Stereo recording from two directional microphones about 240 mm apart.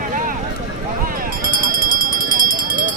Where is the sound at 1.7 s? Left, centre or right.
Right.